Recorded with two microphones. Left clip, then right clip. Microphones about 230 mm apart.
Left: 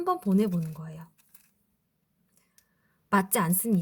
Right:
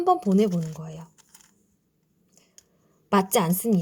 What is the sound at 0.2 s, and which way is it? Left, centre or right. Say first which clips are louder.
Speech: right 5 dB; centre.